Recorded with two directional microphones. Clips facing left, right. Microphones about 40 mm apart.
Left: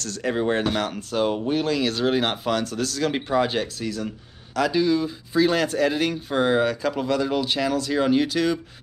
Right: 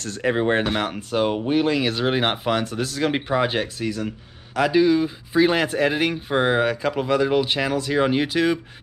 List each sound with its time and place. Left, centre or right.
0.0 s speech: right